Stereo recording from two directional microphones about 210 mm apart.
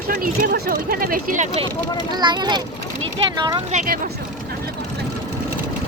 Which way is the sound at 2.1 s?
20° right (ahead or behind).